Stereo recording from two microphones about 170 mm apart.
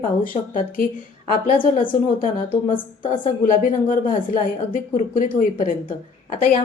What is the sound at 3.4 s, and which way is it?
Speech, 50° left (ahead or behind).